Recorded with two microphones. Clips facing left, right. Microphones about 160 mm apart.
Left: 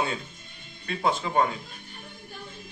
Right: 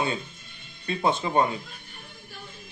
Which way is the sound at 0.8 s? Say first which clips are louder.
Right 2 dB; 20° right (ahead or behind).